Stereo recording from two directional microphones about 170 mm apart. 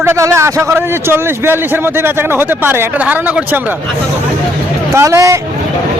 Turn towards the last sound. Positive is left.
turn(degrees=-15)  # may be behind; listen again after turning